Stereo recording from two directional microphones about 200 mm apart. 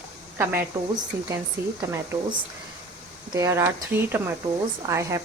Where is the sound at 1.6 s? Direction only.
15° right (ahead or behind).